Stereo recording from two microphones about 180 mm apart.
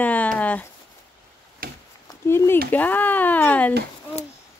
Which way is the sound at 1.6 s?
55° right (ahead or behind).